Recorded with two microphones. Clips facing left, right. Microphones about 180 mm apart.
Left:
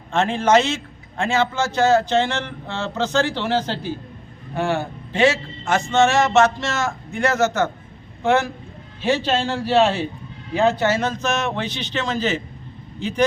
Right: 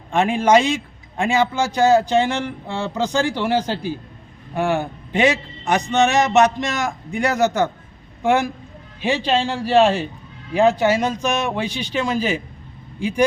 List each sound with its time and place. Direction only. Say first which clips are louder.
0.1 s a man's voice: right 2 dB; 15° right (ahead or behind)